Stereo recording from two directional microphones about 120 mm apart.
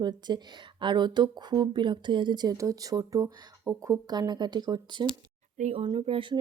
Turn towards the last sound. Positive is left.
turn(degrees=-45)  # may be behind; listen again after turning